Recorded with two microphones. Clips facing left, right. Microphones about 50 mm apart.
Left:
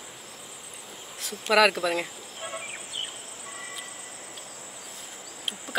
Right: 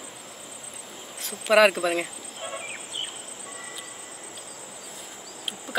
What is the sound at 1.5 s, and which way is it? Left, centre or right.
Speech, right.